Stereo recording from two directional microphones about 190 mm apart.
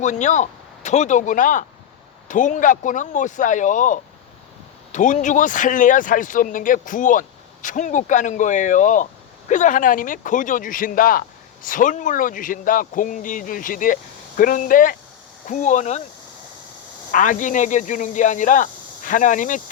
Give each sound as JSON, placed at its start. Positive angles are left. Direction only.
{"t": 0.0, "sound": "speech", "side_deg": 40}
{"t": 17.1, "sound": "speech", "side_deg": 45}